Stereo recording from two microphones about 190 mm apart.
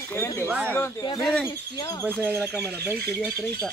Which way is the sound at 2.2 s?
10° right (ahead or behind).